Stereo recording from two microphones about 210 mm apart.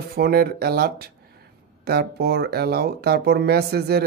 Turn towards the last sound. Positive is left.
turn(degrees=-50)  # may be behind; listen again after turning